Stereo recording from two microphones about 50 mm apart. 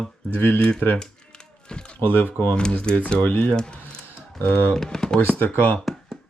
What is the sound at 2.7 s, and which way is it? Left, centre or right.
Speech, left.